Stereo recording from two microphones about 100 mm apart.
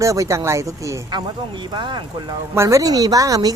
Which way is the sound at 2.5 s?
30° right (ahead or behind).